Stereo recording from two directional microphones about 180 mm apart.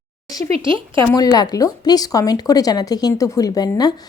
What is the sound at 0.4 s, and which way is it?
Speech, 30° right (ahead or behind).